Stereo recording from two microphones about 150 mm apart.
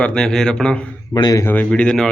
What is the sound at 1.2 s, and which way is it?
Speech, 25° left (ahead or behind).